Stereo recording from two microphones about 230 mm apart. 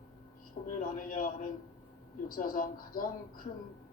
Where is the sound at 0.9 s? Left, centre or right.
Left.